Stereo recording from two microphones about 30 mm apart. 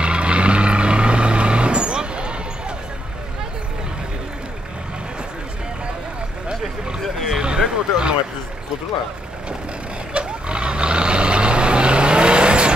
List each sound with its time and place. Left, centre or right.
0.0 s vehicle: right
7.3 s a sound: right
10.1 s vehicle: right